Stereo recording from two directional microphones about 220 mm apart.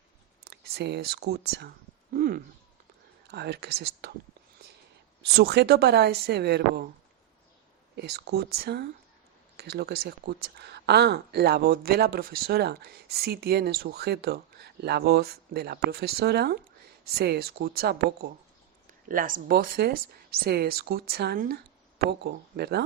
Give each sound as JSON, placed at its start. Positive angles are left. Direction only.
{"t": 0.4, "sound": "speech", "side_deg": -45}
{"t": 2.1, "sound": "a sound", "side_deg": -40}
{"t": 3.2, "sound": "speech", "side_deg": -50}
{"t": 5.2, "sound": "speech", "side_deg": -45}
{"t": 7.9, "sound": "speech", "side_deg": -45}